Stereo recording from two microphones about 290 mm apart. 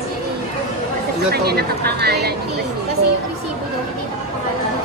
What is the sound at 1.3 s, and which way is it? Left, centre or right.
Speech, right.